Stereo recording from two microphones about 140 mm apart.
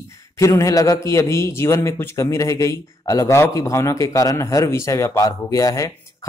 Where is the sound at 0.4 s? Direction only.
20° left (ahead or behind).